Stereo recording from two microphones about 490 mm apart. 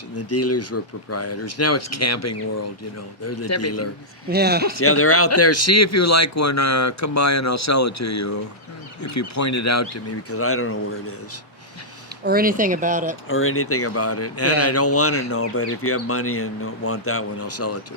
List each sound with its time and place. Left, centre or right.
0.2 s speech: left
4.3 s speech: centre
4.7 s speech: left
12.2 s speech: centre
13.2 s speech: left